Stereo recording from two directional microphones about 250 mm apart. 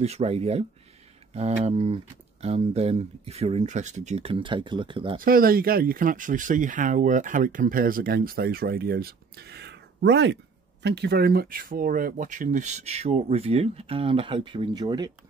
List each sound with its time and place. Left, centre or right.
0.0 s speech: right
5.2 s speech: right; by 15.0 s centre